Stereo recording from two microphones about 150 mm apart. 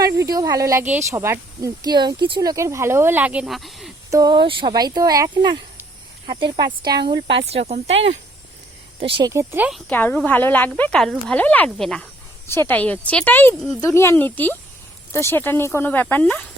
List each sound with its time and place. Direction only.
0.0 s speech: 25° right (ahead or behind); by 3.9 s centre (ahead or behind)
4.1 s speech: 25° right (ahead or behind)
7.1 s speech: 40° right (ahead or behind)
9.0 s speech: 35° right (ahead or behind)
9.3 s speech: 15° right (ahead or behind)
9.9 s speech: 10° left (ahead or behind)